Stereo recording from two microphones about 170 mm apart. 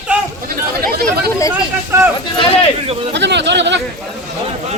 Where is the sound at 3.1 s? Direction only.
90° right.